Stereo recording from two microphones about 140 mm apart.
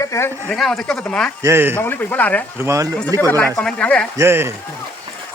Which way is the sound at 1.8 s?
15° left (ahead or behind).